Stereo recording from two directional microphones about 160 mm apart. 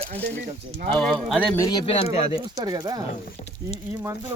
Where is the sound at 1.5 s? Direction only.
25° left (ahead or behind).